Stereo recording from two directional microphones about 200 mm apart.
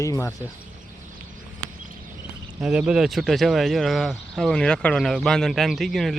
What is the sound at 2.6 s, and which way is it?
Speech, 5° right (ahead or behind).